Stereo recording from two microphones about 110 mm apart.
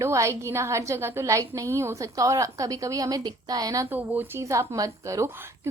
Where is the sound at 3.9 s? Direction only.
15° right (ahead or behind).